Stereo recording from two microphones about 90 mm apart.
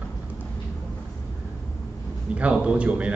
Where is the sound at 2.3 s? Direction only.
10° right (ahead or behind).